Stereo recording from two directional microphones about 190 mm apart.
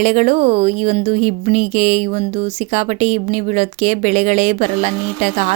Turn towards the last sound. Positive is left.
turn(degrees=-40)  # may be behind; listen again after turning